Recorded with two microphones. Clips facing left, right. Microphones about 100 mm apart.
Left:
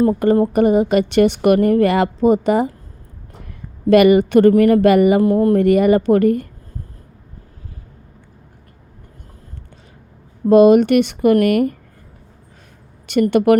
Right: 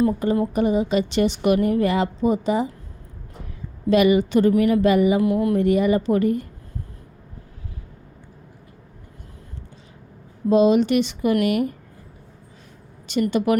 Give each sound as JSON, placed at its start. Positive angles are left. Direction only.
{"t": 0.0, "sound": "a woman's voice", "side_deg": 55}
{"t": 3.8, "sound": "a woman's voice", "side_deg": 60}
{"t": 5.2, "sound": "speech", "side_deg": 40}
{"t": 5.5, "sound": "a woman's voice", "side_deg": 60}
{"t": 10.5, "sound": "a woman's voice", "side_deg": 60}
{"t": 13.3, "sound": "a woman's voice", "side_deg": 60}